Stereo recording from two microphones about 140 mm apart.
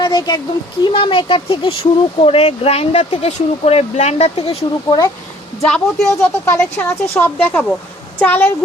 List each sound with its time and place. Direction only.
0.0 s a sound: 30° left (ahead or behind)
0.9 s speech: 35° left (ahead or behind)
4.9 s speech: 25° left (ahead or behind)
5.6 s speech: 5° left (ahead or behind)
6.1 s speech: 20° left (ahead or behind)